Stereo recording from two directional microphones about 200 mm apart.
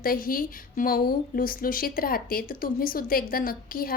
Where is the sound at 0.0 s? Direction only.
45° left (ahead or behind).